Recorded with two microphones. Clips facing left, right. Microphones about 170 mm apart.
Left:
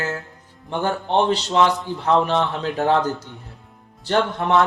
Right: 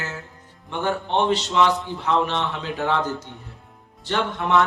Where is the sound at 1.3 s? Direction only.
40° left (ahead or behind).